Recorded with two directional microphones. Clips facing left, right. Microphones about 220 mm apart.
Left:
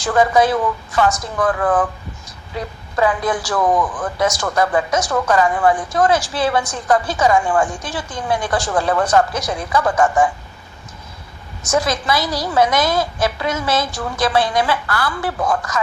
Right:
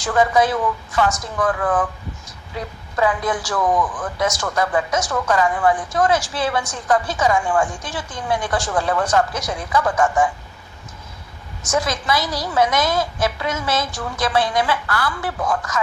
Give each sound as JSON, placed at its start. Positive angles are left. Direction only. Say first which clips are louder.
{"t": 0.0, "sound": "a woman's voice", "louder": "left 2 dB", "side_deg": 35}
{"t": 11.6, "sound": "a woman's voice", "louder": "left 3 dB", "side_deg": 35}